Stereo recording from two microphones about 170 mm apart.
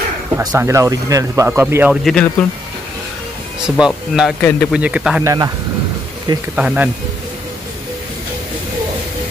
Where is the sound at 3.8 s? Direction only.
5° right (ahead or behind).